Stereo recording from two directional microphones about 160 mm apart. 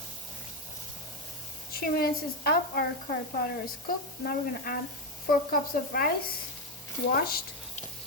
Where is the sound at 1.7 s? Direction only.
70° left (ahead or behind).